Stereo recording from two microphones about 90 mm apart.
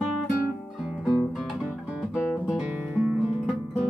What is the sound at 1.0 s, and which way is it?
Guitar, 5° right (ahead or behind).